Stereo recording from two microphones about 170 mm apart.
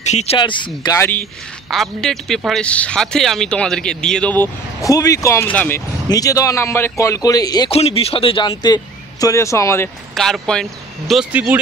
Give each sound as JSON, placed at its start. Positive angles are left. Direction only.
{"t": 0.0, "sound": "speech", "side_deg": 40}
{"t": 0.9, "sound": "a man's voice", "side_deg": 10}
{"t": 4.8, "sound": "a man's voice", "side_deg": 20}
{"t": 7.7, "sound": "a man's voice", "side_deg": 35}
{"t": 10.1, "sound": "a man's voice", "side_deg": 0}